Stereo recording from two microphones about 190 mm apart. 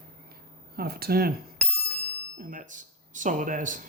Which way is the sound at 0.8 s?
55° right (ahead or behind).